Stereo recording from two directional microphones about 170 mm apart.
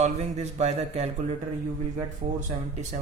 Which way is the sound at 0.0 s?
40° right (ahead or behind).